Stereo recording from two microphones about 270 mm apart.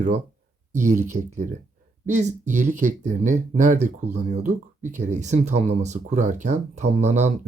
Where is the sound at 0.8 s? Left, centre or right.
Right.